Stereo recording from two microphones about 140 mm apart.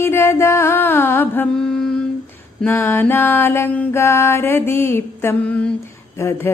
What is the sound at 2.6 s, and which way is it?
Music, 15° left (ahead or behind).